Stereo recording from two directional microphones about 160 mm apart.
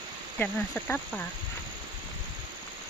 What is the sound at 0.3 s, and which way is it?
Speech, 10° left (ahead or behind).